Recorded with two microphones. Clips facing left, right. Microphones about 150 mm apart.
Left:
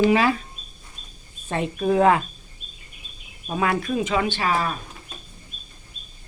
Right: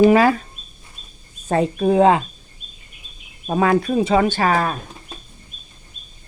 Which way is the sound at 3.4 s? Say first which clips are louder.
Right 6 dB; 40° right (ahead or behind).